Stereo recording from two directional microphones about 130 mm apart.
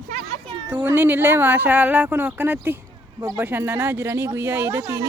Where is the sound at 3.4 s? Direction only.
15° right (ahead or behind).